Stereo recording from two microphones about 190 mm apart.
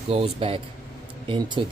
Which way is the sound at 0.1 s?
30° right (ahead or behind).